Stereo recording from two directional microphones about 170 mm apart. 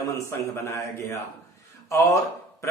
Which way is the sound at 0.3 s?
15° left (ahead or behind).